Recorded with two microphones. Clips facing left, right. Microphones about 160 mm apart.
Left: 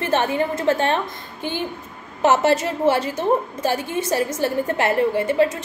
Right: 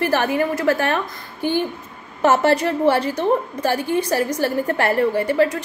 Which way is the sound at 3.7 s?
20° left (ahead or behind).